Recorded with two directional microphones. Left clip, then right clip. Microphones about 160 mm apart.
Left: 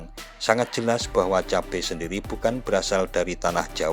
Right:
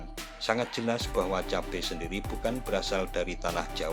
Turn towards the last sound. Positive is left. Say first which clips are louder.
# left 7 dB
turn(degrees=45)  # may be behind; listen again after turning